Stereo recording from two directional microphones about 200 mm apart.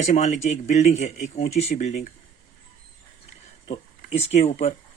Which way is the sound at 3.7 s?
30° left (ahead or behind).